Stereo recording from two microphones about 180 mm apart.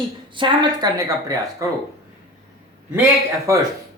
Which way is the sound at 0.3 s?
25° right (ahead or behind).